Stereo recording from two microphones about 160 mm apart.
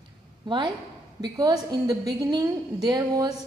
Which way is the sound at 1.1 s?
25° right (ahead or behind).